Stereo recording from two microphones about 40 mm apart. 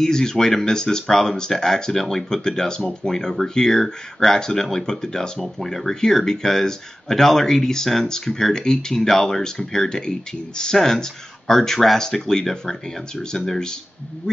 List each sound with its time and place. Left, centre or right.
0.0 s speech: centre
10.8 s speech: centre
14.3 s a sound: centre